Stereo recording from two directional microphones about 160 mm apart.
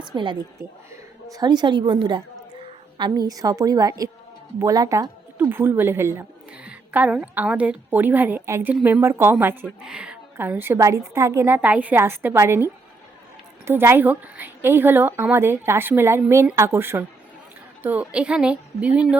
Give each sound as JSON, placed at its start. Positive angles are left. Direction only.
{"t": 0.0, "sound": "a woman's voice", "side_deg": -30}
{"t": 13.7, "sound": "a woman's voice", "side_deg": -15}